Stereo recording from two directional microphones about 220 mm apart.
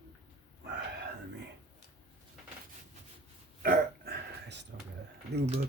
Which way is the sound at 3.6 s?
45° right (ahead or behind).